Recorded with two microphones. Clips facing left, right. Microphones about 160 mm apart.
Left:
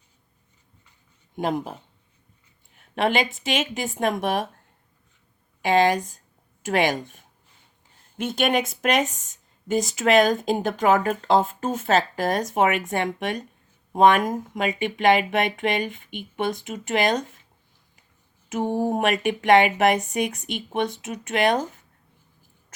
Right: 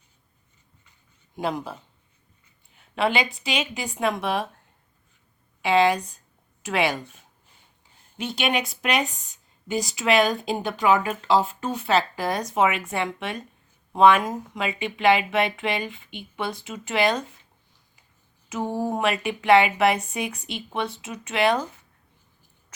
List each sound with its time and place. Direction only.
1.4 s speech: 45° left (ahead or behind)
2.9 s a woman's voice: 45° left (ahead or behind)
5.6 s speech: 40° left (ahead or behind)
8.2 s speech: 50° left (ahead or behind)
18.6 s a sound: 15° left (ahead or behind)
18.9 s speech: 45° left (ahead or behind)